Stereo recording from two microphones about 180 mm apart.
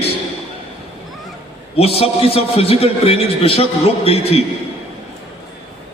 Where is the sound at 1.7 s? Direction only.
35° left (ahead or behind).